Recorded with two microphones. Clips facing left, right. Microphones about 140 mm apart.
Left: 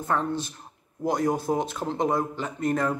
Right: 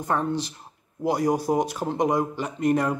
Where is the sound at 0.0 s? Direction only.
15° right (ahead or behind).